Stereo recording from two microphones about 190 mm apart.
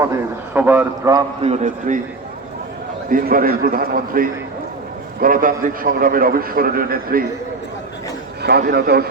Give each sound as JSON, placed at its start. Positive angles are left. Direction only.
{"t": 0.5, "sound": "a man's voice", "side_deg": -10}
{"t": 1.4, "sound": "a man's voice", "side_deg": -35}
{"t": 3.1, "sound": "a man's voice", "side_deg": -45}
{"t": 8.4, "sound": "a man's voice", "side_deg": -60}